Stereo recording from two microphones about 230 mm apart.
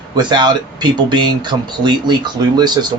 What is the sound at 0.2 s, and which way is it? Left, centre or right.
Speech, centre.